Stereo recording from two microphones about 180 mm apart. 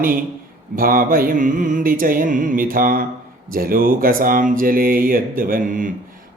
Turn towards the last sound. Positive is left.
turn(degrees=-50)  # may be behind; listen again after turning